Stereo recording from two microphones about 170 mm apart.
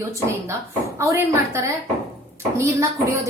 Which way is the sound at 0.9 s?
15° right (ahead or behind).